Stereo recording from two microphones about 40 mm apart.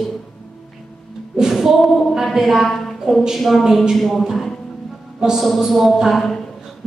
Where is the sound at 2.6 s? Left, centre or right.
Centre.